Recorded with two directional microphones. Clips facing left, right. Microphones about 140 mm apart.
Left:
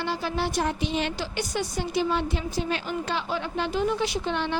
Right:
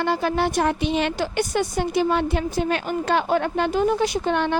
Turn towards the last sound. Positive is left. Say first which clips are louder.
# right 6 dB
turn(degrees=-50)  # may be behind; listen again after turning